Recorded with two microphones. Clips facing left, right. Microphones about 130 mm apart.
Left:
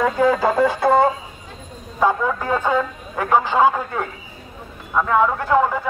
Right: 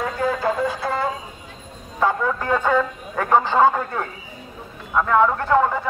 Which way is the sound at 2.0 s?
15° left (ahead or behind).